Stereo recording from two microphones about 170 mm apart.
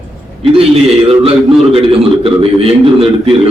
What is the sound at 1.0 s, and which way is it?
A man's voice, 35° right (ahead or behind).